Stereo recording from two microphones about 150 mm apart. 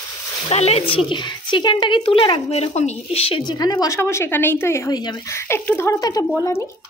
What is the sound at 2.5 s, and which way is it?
A woman's voice, 45° left (ahead or behind).